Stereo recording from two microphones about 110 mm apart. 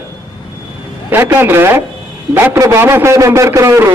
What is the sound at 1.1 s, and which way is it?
A man's voice, 20° right (ahead or behind).